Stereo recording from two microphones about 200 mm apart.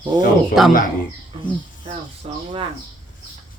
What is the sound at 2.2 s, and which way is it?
Speech, 30° right (ahead or behind).